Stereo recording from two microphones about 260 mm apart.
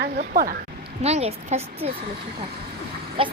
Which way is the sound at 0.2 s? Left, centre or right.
Right.